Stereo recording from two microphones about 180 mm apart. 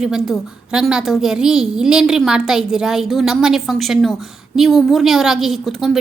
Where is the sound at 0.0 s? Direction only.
5° right (ahead or behind).